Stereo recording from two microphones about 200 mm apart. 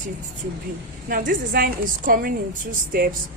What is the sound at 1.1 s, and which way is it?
A woman's voice, 45° right (ahead or behind).